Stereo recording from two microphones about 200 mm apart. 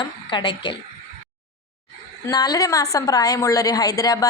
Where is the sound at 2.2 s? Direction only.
20° left (ahead or behind).